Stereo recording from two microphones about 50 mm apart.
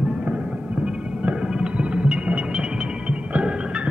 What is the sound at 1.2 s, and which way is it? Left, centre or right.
Music, right.